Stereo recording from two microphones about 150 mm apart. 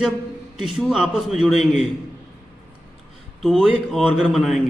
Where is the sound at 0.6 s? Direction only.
5° right (ahead or behind).